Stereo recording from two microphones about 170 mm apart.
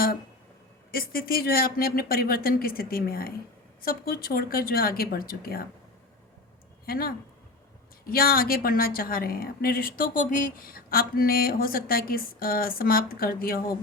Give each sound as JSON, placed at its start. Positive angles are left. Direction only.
{"t": 0.9, "sound": "a woman's voice", "side_deg": 60}
{"t": 6.8, "sound": "a woman's voice", "side_deg": 60}